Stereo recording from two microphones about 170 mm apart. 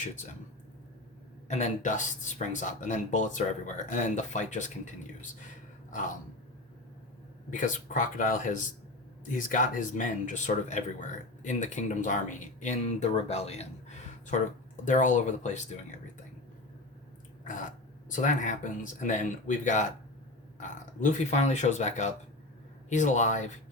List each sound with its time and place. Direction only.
1.5 s speech: 45° left (ahead or behind)
5.9 s speech: 50° left (ahead or behind)
7.5 s speech: 50° left (ahead or behind)
17.4 s speech: 50° left (ahead or behind)